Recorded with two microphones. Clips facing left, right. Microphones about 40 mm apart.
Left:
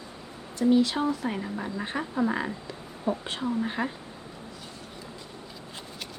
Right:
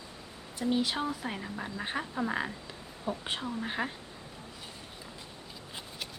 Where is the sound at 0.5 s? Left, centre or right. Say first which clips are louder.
Left 8 dB; centre.